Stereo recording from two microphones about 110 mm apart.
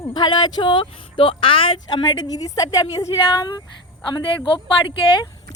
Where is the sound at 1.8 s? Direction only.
40° left (ahead or behind).